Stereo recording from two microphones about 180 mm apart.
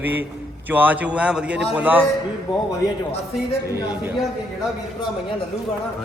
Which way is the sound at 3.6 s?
15° right (ahead or behind).